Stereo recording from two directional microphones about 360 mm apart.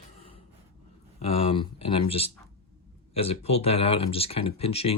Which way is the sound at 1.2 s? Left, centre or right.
Centre.